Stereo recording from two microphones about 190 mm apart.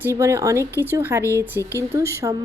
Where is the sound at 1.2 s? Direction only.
15° left (ahead or behind).